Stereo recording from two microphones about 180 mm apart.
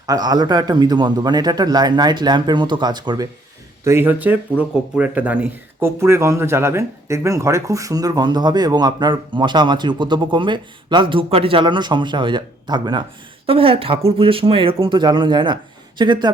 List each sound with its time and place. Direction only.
0.0 s speech: 20° right (ahead or behind)
3.8 s speech: 15° right (ahead or behind)